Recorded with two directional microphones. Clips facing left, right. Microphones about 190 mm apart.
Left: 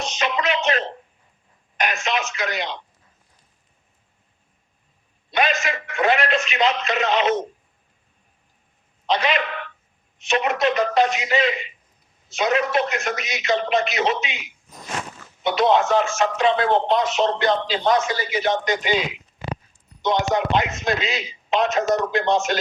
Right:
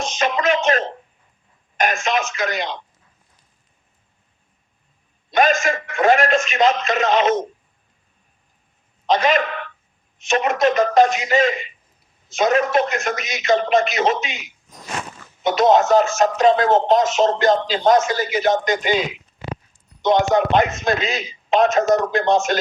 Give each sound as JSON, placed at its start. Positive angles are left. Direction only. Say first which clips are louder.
{"t": 0.0, "sound": "a sound", "louder": "right 4 dB", "side_deg": -45}
{"t": 1.8, "sound": "radio", "louder": "right 4 dB", "side_deg": -45}
{"t": 5.3, "sound": "a man's voice", "louder": "right 5 dB", "side_deg": -45}
{"t": 9.0, "sound": "a man's voice", "louder": "right 4 dB", "side_deg": -45}
{"t": 20.0, "sound": "speech", "louder": "right 5 dB", "side_deg": -50}